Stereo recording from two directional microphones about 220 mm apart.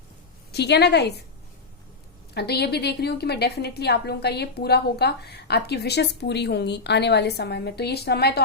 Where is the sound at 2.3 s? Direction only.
45° left (ahead or behind).